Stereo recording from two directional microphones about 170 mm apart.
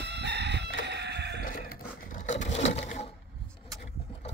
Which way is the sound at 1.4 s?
55° left (ahead or behind).